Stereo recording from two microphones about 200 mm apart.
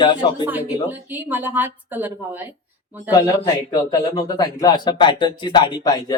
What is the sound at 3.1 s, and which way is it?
Speech, 20° left (ahead or behind).